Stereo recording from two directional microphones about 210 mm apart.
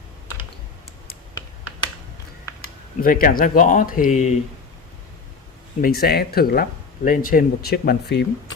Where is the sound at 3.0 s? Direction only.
40° left (ahead or behind).